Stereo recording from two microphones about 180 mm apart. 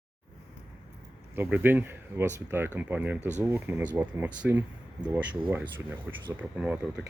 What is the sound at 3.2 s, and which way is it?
Speech, 40° right (ahead or behind).